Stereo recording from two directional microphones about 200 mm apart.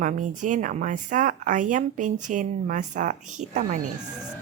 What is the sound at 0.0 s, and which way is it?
Speech, 40° right (ahead or behind).